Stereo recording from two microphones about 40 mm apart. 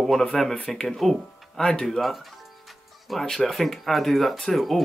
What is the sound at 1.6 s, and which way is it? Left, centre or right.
Speech, centre.